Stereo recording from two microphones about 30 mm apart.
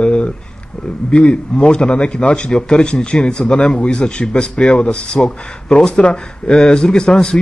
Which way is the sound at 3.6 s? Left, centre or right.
Left.